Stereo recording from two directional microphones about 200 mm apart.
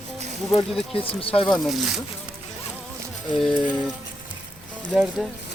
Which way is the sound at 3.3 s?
Centre (ahead or behind).